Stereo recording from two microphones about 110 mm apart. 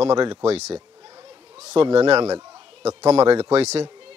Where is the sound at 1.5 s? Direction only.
80° right.